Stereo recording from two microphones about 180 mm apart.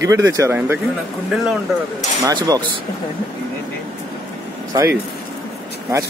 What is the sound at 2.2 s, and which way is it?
Speech, 20° right (ahead or behind).